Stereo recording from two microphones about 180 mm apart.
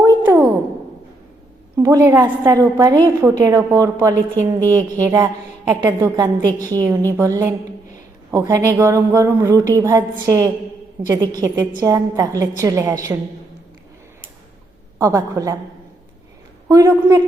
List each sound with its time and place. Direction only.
0.2 s a sound: 15° right (ahead or behind)
1.7 s a woman's voice: 20° right (ahead or behind)
14.9 s a woman's voice: 20° right (ahead or behind)
16.6 s a woman's voice: 20° right (ahead or behind)